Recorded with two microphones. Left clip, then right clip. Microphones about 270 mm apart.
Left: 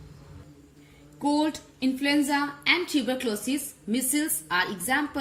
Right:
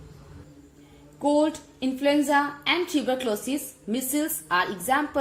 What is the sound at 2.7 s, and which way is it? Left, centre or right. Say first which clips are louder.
A woman's voice: even; left.